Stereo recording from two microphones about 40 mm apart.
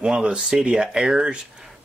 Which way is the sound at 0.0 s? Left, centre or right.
Right.